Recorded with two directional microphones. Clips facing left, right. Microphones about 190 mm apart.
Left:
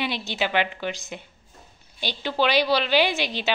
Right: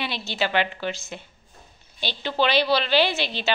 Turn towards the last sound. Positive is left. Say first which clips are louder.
# even
turn(degrees=15)  # may be behind; listen again after turning